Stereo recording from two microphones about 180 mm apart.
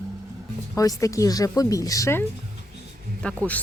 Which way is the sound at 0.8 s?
20° left (ahead or behind).